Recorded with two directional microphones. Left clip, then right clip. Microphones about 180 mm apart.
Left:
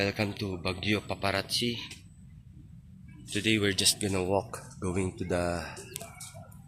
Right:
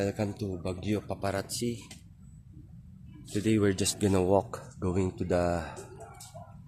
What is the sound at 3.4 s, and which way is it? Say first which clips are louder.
Speech: even; 35° right (ahead or behind).